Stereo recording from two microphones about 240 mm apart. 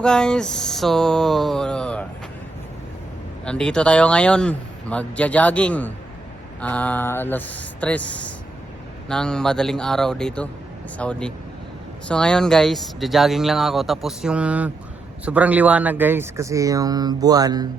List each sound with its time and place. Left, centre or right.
0.0 s speech: centre
3.4 s speech: centre